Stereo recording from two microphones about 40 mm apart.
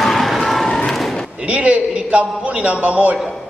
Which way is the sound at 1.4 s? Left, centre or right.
Right.